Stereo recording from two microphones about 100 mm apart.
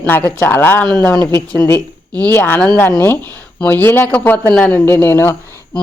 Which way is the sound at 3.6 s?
20° left (ahead or behind).